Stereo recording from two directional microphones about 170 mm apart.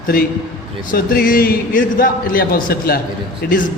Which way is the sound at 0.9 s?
60° left (ahead or behind).